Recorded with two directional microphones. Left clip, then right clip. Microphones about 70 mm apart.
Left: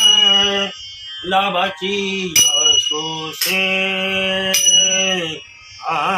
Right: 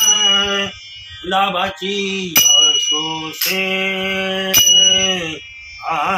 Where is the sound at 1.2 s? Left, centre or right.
Centre.